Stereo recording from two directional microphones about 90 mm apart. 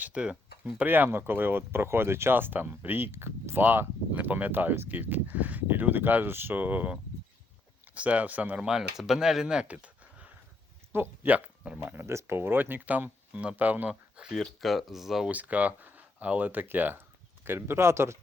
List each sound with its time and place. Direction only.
0.0 s speech: 10° right (ahead or behind)
11.8 s speech: 25° right (ahead or behind)
14.3 s speech: centre (ahead or behind)
15.3 s speech: 15° right (ahead or behind)